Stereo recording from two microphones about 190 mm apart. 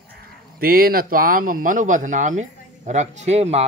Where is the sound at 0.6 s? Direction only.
50° right (ahead or behind); by 3.7 s 35° right (ahead or behind).